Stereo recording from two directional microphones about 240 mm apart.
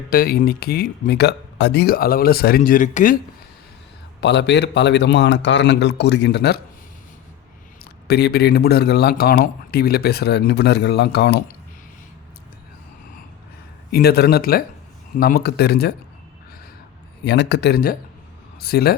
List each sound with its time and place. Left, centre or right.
0.1 s speech: left
4.2 s speech: left
8.0 s speech: left
13.9 s speech: left
17.2 s speech: left